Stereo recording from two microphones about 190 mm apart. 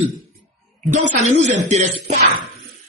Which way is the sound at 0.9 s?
40° right (ahead or behind).